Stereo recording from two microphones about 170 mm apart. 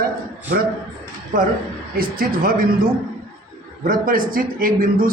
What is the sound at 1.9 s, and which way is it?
A man's voice, 60° right (ahead or behind).